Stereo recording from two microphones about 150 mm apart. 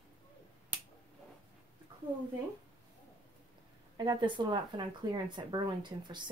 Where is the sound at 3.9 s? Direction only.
30° right (ahead or behind).